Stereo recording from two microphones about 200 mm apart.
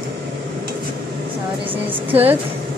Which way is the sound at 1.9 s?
30° right (ahead or behind).